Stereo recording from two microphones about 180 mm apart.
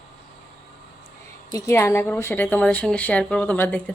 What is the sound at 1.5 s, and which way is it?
Speech, 20° left (ahead or behind).